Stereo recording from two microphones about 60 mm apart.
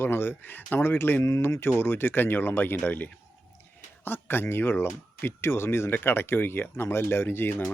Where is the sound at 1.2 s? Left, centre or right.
Left.